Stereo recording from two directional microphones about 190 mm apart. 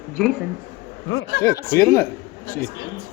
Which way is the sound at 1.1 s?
85° left.